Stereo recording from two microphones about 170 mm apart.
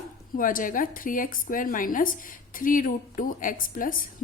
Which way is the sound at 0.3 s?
55° left (ahead or behind).